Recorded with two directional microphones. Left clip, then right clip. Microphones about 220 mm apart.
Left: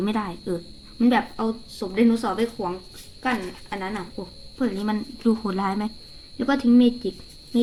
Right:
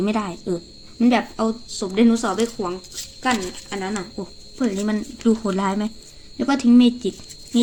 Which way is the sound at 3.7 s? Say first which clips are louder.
Right 2 dB; 5° right (ahead or behind).